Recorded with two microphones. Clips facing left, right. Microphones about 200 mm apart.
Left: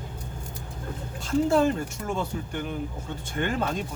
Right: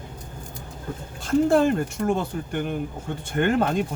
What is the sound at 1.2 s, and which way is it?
Speech, 55° right (ahead or behind).